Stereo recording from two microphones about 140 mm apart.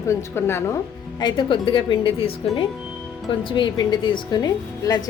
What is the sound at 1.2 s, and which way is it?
A woman's voice, 30° left (ahead or behind).